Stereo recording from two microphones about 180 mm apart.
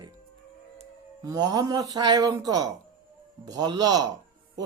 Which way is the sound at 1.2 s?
20° right (ahead or behind).